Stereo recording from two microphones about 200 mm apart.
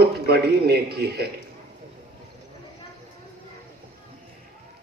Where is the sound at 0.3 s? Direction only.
55° right (ahead or behind).